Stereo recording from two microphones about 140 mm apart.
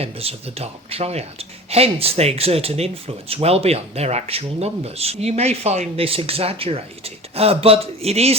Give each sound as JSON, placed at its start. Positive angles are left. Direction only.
{"t": 0.0, "sound": "speech", "side_deg": -45}